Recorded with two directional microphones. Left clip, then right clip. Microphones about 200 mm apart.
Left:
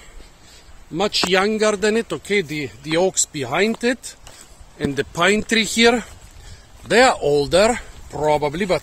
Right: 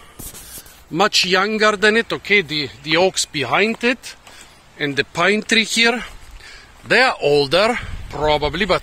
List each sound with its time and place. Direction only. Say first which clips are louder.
0.9 s speech: right 3 dB; centre (ahead or behind); by 8.7 s 15° left (ahead or behind)